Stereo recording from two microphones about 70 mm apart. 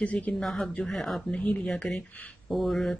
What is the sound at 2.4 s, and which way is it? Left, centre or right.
Mantra, centre.